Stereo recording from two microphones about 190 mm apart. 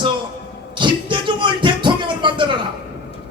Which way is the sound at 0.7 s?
25° right (ahead or behind).